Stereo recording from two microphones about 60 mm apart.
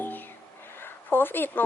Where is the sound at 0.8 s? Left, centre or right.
Left.